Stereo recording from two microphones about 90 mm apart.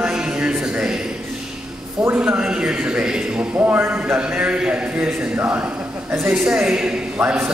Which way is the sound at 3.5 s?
20° right (ahead or behind).